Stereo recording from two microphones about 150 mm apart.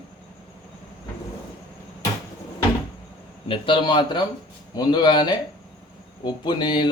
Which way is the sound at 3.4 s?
35° left (ahead or behind).